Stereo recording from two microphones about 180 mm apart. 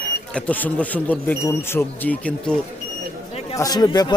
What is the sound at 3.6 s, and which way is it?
Speech, 20° left (ahead or behind).